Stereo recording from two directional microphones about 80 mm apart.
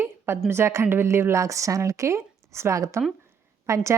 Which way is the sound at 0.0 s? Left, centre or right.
Right.